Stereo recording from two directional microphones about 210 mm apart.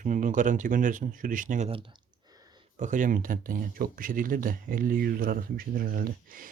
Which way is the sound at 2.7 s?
35° right (ahead or behind).